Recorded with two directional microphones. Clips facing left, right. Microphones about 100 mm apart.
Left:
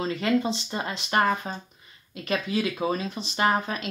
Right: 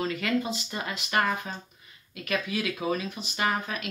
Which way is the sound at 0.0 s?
25° left (ahead or behind).